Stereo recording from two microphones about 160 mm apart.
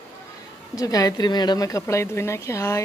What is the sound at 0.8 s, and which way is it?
Speech, 20° left (ahead or behind).